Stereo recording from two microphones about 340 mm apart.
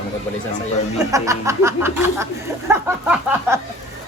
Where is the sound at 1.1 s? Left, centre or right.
Centre.